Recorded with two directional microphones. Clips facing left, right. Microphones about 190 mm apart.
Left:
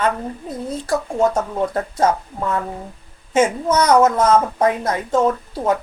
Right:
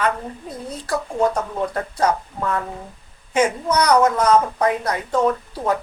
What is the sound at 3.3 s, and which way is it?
Speech, 25° left (ahead or behind).